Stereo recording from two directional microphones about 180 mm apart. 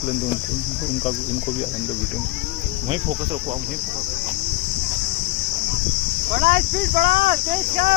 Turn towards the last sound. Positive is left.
turn(degrees=-50)  # may be behind; listen again after turning